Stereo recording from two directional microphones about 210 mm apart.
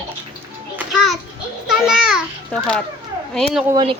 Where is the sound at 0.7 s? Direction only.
Centre (ahead or behind).